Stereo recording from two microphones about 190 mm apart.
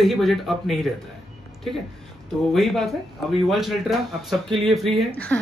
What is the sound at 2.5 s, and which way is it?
A man's voice, centre (ahead or behind).